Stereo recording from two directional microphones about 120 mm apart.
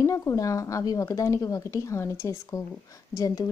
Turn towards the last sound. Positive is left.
turn(degrees=30)  # may be behind; listen again after turning